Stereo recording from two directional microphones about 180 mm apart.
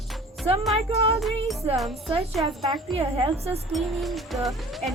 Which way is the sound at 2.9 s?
35° right (ahead or behind).